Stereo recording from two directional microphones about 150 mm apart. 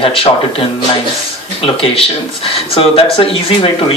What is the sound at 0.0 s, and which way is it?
Speech, 35° left (ahead or behind).